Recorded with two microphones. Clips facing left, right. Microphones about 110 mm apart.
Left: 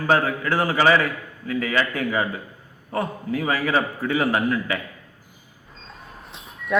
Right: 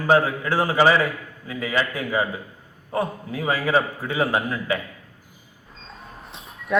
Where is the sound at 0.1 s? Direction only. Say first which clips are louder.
Right 2 dB; 20° right (ahead or behind).